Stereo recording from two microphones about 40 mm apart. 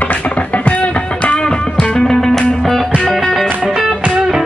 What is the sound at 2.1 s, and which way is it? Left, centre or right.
Music, centre.